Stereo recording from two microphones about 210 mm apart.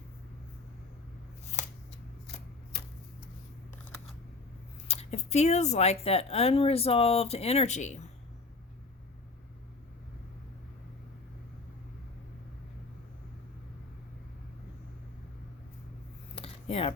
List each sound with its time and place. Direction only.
1.5 s shuffling cards: 35° left (ahead or behind)
2.7 s tick-tock: 55° left (ahead or behind)
4.9 s speech: 30° left (ahead or behind)
16.3 s a sound: 25° left (ahead or behind)